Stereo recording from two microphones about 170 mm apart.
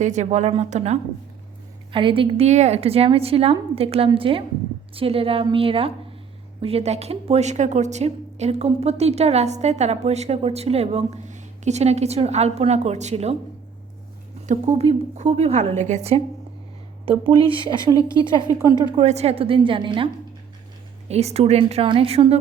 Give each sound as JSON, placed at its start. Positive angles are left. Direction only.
{"t": 0.0, "sound": "a woman's voice", "side_deg": -45}
{"t": 1.9, "sound": "a woman's voice", "side_deg": -30}
{"t": 2.5, "sound": "a woman's voice", "side_deg": -40}
{"t": 14.4, "sound": "a woman's voice", "side_deg": -45}
{"t": 18.9, "sound": "a woman's voice", "side_deg": -40}
{"t": 21.1, "sound": "a woman's voice", "side_deg": -40}